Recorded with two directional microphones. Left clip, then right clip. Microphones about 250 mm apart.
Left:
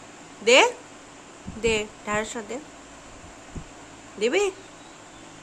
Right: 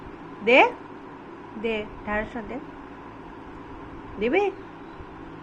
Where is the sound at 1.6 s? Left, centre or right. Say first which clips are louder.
Left 4 dB; left.